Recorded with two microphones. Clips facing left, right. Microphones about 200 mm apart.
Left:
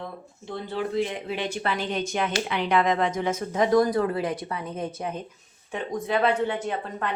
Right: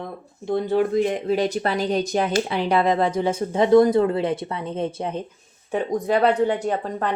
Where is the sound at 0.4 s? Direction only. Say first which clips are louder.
Right 10 dB; 50° right (ahead or behind).